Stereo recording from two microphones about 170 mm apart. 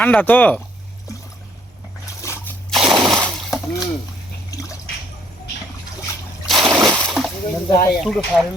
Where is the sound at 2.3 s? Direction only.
15° left (ahead or behind).